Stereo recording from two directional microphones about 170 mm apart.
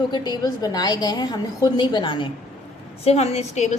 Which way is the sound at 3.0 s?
40° left (ahead or behind).